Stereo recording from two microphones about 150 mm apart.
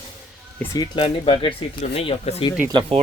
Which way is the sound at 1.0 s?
40° left (ahead or behind).